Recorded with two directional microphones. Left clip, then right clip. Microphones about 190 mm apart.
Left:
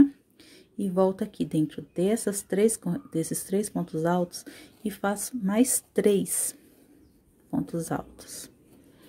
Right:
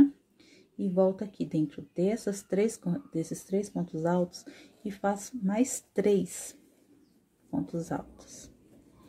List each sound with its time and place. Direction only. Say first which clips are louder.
0.0 s speech: left 2 dB; 25° left (ahead or behind)
7.6 s speech: left 3 dB; 25° left (ahead or behind)